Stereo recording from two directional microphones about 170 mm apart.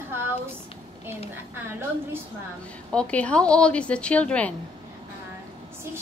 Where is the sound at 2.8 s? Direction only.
5° left (ahead or behind).